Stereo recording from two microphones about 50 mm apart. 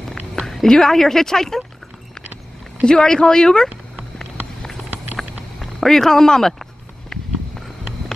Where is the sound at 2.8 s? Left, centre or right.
Centre.